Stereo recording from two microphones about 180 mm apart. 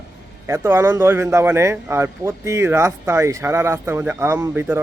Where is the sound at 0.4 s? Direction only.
15° right (ahead or behind).